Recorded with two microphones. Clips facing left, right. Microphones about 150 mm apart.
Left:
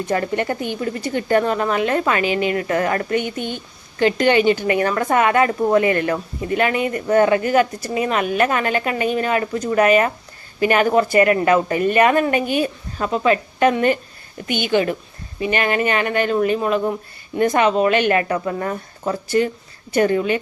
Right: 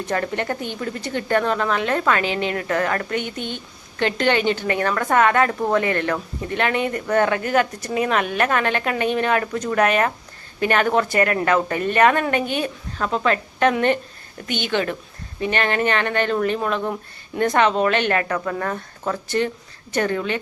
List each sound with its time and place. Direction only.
0.1 s a woman's voice: 10° left (ahead or behind)
3.3 s speech: 50° left (ahead or behind)
4.0 s a woman's voice: 10° left (ahead or behind)